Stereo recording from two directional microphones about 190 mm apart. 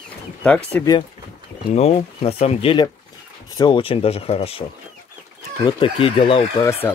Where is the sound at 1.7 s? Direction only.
35° left (ahead or behind).